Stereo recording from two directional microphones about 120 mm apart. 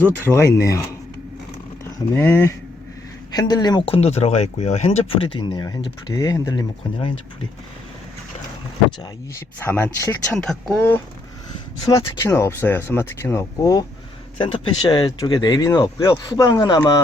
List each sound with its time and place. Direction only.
0.3 s speech: 25° left (ahead or behind)
1.8 s speech: 20° left (ahead or behind)
3.3 s speech: 35° left (ahead or behind)
3.8 s speech: 60° left (ahead or behind); by 7.1 s 35° left (ahead or behind)
9.6 s speech: 20° left (ahead or behind)
10.3 s speech: 5° left (ahead or behind)
11.9 s speech: 25° left (ahead or behind)
14.3 s speech: 45° left (ahead or behind); by 16.1 s 25° left (ahead or behind)
16.2 s speech: 40° left (ahead or behind)